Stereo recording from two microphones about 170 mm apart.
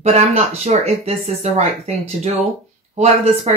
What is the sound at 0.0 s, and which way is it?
Speech, 40° right (ahead or behind).